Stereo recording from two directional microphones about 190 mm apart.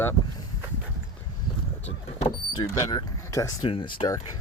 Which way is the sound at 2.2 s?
25° left (ahead or behind).